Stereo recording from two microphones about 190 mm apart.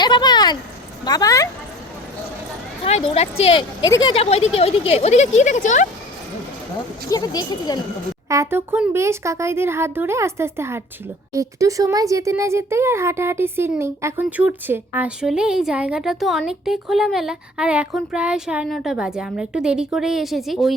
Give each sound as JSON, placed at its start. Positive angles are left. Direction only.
{"t": 0.0, "sound": "a sound", "side_deg": 20}
{"t": 1.0, "sound": "speech", "side_deg": 20}
{"t": 2.8, "sound": "speech", "side_deg": 30}
{"t": 7.1, "sound": "speech", "side_deg": 20}
{"t": 8.3, "sound": "a woman's voice", "side_deg": -15}